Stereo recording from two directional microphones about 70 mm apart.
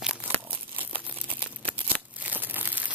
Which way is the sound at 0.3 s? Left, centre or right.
Right.